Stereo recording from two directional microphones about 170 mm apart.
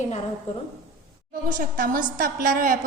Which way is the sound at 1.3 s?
50° right (ahead or behind).